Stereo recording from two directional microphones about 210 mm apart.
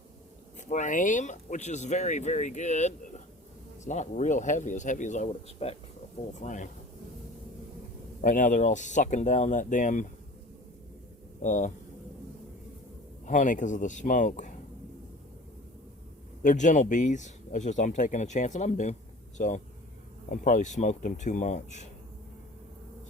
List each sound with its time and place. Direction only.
0.7 s speech: 35° left (ahead or behind)
8.2 s speech: 40° left (ahead or behind)
11.4 s speech: 35° left (ahead or behind)
13.2 s speech: 35° left (ahead or behind)
16.4 s speech: 35° left (ahead or behind)